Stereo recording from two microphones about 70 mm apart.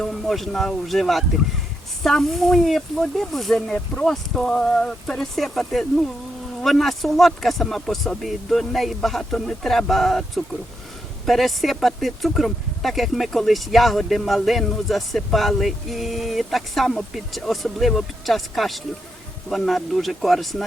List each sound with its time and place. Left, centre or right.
0.0 s speech: centre